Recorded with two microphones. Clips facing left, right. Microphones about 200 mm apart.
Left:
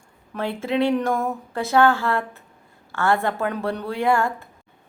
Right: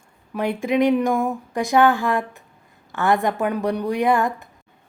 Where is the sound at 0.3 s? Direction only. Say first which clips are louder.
Right 3 dB; 15° right (ahead or behind).